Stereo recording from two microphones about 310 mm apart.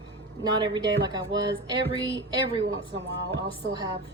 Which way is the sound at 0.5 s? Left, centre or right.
Centre.